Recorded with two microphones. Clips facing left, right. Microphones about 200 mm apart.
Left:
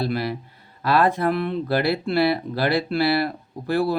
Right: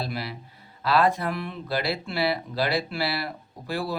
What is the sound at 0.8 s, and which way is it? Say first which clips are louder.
Speech: left 3 dB; 50° left (ahead or behind).